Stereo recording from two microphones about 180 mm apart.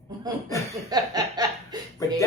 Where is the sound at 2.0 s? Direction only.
15° left (ahead or behind).